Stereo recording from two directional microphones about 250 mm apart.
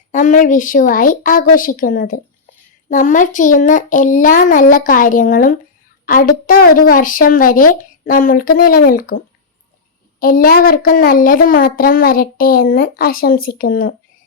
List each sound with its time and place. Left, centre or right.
0.1 s speech: left